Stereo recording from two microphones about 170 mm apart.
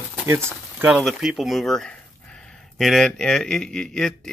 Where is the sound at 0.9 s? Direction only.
Centre (ahead or behind).